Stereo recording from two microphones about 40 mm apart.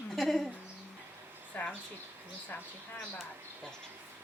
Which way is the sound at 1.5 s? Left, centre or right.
Left.